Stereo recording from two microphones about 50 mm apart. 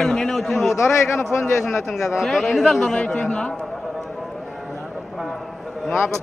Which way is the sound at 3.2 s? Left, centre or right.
Left.